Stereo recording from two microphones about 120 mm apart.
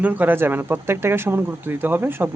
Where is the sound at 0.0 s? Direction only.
15° right (ahead or behind).